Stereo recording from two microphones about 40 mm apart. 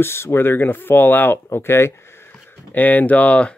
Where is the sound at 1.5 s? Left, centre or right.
Left.